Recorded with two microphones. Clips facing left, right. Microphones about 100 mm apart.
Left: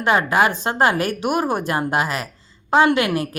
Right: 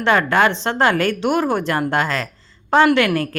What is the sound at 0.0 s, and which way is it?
A woman's voice, 15° left (ahead or behind).